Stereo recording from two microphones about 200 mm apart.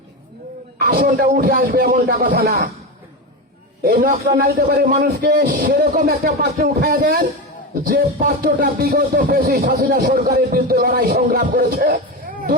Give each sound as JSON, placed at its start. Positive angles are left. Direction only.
{"t": 0.8, "sound": "music", "side_deg": -50}
{"t": 3.8, "sound": "music", "side_deg": -45}